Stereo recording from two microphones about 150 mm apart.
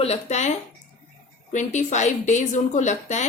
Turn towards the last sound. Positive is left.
turn(degrees=50)  # may be behind; listen again after turning